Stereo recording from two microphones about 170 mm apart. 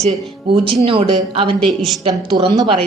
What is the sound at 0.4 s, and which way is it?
A man's voice, 30° right (ahead or behind).